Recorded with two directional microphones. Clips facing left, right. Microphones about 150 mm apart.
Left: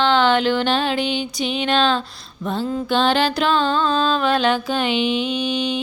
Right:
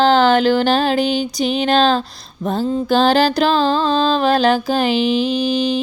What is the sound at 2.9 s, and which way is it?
Lullaby, 40° right (ahead or behind).